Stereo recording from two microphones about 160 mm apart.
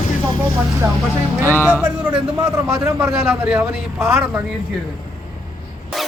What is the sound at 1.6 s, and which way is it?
A man's voice, 15° right (ahead or behind).